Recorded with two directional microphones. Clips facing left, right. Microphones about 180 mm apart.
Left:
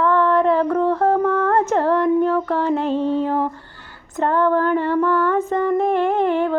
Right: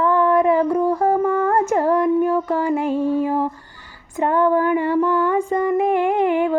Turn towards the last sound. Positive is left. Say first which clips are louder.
# even
turn(degrees=-15)  # may be behind; listen again after turning